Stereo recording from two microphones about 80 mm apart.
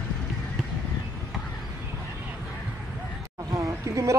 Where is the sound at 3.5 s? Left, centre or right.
Right.